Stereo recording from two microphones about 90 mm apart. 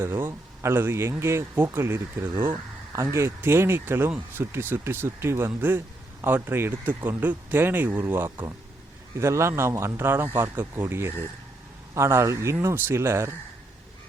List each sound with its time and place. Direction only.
0.0 s a man's voice: 30° right (ahead or behind)